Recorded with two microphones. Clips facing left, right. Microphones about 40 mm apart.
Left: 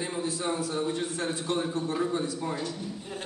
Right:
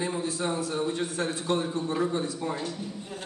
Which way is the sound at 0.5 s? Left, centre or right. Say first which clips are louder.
Right 1 dB; right.